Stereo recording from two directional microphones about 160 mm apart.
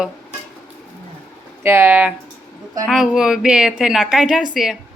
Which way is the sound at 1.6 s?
15° right (ahead or behind).